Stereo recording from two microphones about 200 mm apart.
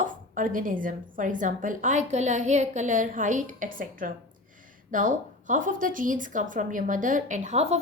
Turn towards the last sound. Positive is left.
turn(degrees=-35)  # may be behind; listen again after turning